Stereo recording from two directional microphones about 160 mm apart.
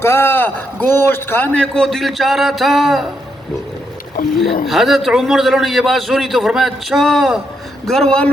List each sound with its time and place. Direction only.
0.0 s a man's voice: 15° left (ahead or behind); by 3.1 s centre (ahead or behind)
4.6 s a man's voice: centre (ahead or behind)